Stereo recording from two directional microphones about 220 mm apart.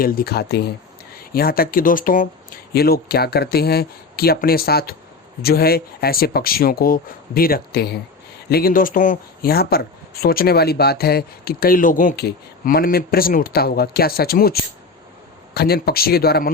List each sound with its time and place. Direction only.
0.0 s speech: 45° left (ahead or behind)